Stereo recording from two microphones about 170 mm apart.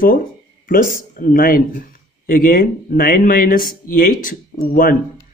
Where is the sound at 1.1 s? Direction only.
55° left (ahead or behind).